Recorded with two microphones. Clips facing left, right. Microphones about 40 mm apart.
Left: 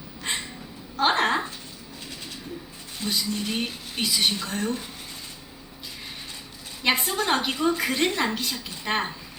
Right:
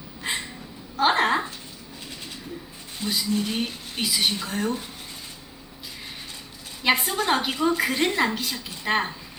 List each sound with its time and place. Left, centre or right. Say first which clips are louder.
0.2 s cat: right 1 dB; centre
0.9 s a sound: right 1 dB; centre
3.0 s a woman's voice: right 2 dB; centre
6.8 s a woman's voice: right 2 dB; centre